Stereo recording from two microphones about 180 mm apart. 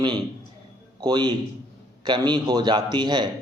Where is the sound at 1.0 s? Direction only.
25° right (ahead or behind).